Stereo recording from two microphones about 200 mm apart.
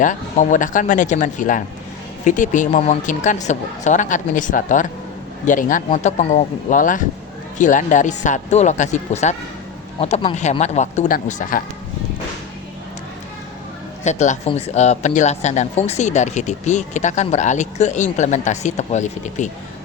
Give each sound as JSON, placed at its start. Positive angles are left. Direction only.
{"t": 0.0, "sound": "speech", "side_deg": 40}
{"t": 14.0, "sound": "speech", "side_deg": 35}